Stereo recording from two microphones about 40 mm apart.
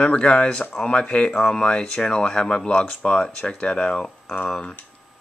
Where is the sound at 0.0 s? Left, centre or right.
Left.